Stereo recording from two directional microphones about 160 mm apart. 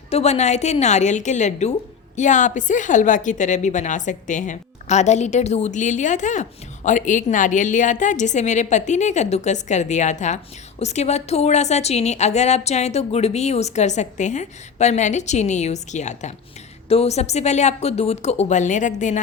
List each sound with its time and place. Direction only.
0.1 s a woman's voice: 40° left (ahead or behind)